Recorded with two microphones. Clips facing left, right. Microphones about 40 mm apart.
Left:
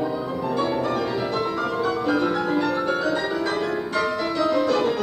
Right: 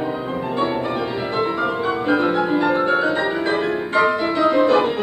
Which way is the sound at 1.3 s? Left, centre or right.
Right.